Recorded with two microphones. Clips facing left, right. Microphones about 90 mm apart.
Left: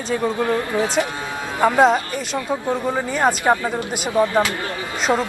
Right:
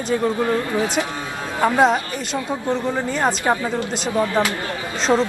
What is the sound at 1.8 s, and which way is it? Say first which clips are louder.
A woman's voice: left 2 dB; centre (ahead or behind).